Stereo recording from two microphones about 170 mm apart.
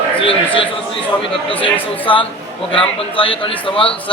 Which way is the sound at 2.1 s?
30° left (ahead or behind).